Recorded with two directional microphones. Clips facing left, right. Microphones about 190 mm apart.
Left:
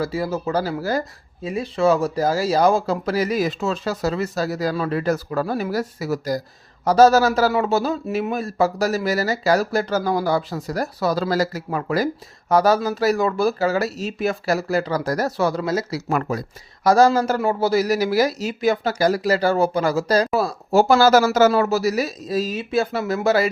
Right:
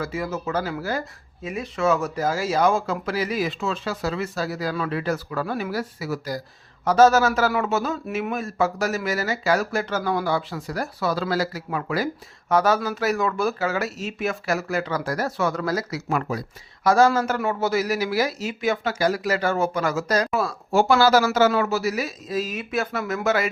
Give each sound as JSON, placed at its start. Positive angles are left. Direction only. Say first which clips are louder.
{"t": 0.0, "sound": "a man's voice", "louder": "left 4 dB", "side_deg": 35}
{"t": 16.0, "sound": "a man's voice", "louder": "left 3 dB", "side_deg": 45}